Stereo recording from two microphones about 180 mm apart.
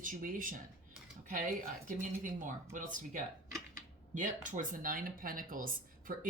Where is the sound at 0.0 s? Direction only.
50° right (ahead or behind).